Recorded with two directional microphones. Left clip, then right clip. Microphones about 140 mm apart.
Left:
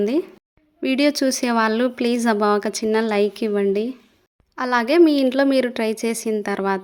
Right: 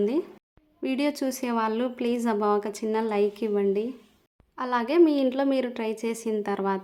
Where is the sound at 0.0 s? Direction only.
25° left (ahead or behind).